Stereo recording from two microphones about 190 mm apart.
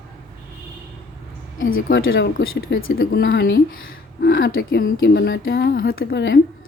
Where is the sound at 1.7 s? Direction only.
90° left.